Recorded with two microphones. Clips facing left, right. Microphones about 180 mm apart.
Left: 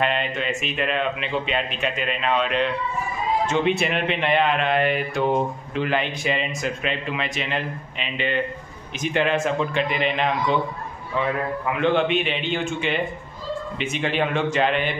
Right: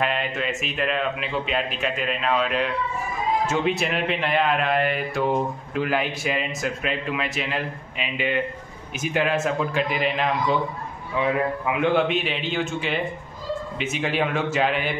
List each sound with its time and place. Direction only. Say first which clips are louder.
0.0 s speech: left 1 dB; centre (ahead or behind)